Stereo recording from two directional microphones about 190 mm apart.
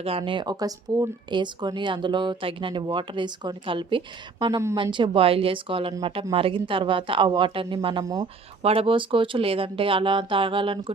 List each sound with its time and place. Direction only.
0.0 s speech: 30° right (ahead or behind)